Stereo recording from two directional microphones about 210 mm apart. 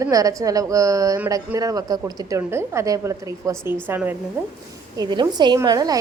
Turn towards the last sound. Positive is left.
turn(degrees=-20)  # may be behind; listen again after turning